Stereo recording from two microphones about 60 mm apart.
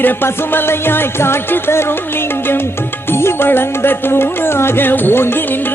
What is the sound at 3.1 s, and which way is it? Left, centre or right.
Music, left.